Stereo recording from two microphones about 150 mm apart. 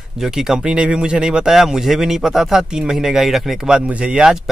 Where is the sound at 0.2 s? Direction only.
5° right (ahead or behind).